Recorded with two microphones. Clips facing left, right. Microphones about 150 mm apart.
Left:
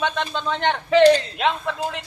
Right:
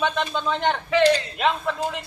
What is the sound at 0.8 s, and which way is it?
Speech, 30° left (ahead or behind).